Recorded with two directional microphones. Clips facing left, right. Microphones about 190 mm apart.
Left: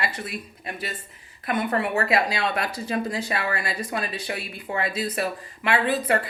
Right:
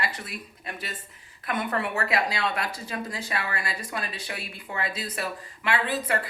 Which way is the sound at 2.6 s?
20° left (ahead or behind).